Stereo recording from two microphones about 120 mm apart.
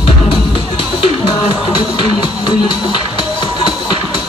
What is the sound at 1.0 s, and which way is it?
Music, 45° left (ahead or behind).